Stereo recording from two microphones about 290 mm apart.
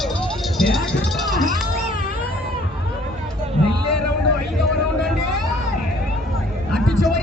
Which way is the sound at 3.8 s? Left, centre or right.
Left.